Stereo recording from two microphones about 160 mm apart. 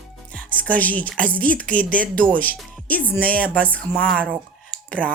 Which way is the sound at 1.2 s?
60° right (ahead or behind).